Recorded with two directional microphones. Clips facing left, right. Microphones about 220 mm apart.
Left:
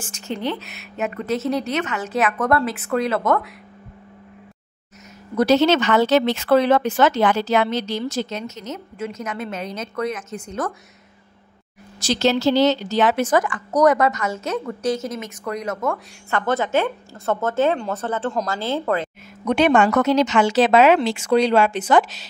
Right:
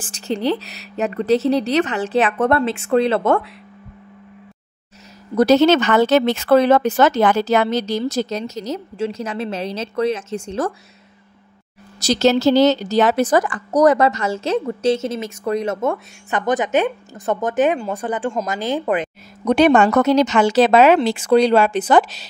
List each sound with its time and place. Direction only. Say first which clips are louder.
0.0 s speech: right 5 dB; 35° right (ahead or behind)
5.3 s speech: right 3 dB; 40° right (ahead or behind)
12.0 s a woman's voice: right 4 dB; 40° right (ahead or behind); by 19.0 s 15° right (ahead or behind)
19.4 s speech: right 3 dB; 40° right (ahead or behind)